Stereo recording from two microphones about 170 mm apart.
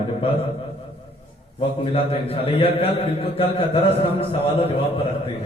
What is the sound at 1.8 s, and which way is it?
A man's voice, 35° left (ahead or behind).